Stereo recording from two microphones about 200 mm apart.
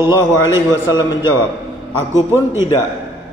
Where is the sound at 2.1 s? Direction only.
15° right (ahead or behind).